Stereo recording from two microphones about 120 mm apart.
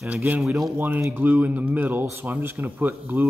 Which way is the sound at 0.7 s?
15° right (ahead or behind).